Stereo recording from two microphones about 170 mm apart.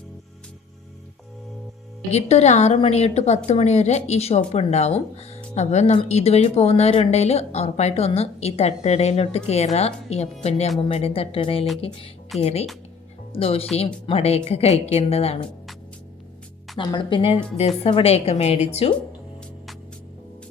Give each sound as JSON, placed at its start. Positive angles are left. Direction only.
{"t": 2.0, "sound": "speech", "side_deg": 40}
{"t": 16.7, "sound": "speech", "side_deg": 25}